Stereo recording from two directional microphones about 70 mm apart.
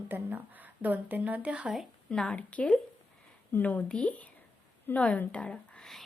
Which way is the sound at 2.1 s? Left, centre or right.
Centre.